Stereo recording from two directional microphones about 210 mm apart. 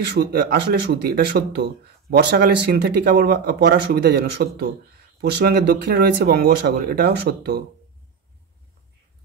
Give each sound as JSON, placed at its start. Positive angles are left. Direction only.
{"t": 0.2, "sound": "speech", "side_deg": -50}